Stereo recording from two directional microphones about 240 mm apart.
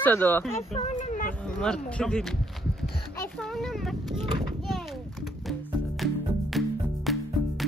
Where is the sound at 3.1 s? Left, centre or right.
Centre.